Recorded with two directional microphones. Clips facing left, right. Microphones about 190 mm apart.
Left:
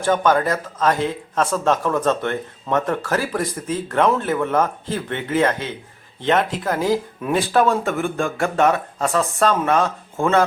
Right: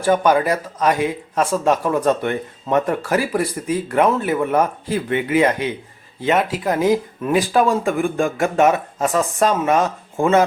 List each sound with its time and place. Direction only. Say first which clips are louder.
0.0 s speech: right 2 dB; 10° right (ahead or behind)
6.7 s speech: right 3 dB; 20° right (ahead or behind)
7.2 s speech: right 1 dB; centre (ahead or behind)
8.0 s speech: right 3 dB; 15° right (ahead or behind)